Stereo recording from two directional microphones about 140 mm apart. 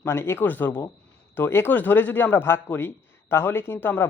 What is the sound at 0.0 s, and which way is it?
A man's voice, 20° left (ahead or behind).